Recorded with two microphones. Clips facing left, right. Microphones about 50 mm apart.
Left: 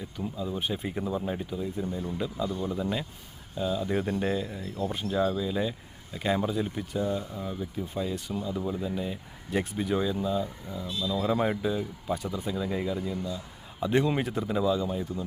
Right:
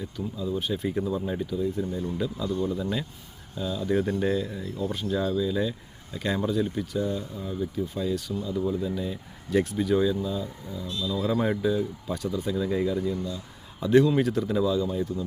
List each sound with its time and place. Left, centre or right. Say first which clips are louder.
0.2 s speech: right 2 dB; centre
1.8 s a man's voice: right 3 dB; centre
2.1 s speech: right 3 dB; centre
10.8 s speech: even; centre